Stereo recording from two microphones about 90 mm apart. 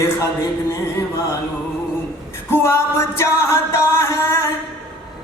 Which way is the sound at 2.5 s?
30° left (ahead or behind).